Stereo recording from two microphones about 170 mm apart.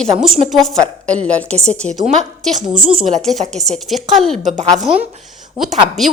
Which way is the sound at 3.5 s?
Centre (ahead or behind).